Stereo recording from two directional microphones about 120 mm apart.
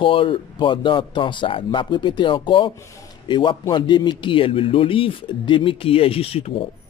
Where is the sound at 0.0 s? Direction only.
45° left (ahead or behind).